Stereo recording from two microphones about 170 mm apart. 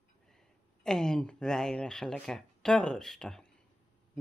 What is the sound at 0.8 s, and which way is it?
Speech, 5° left (ahead or behind).